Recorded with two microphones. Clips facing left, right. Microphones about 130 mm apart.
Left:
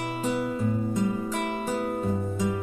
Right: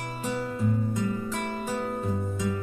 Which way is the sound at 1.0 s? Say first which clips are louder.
Left 2 dB; 15° left (ahead or behind).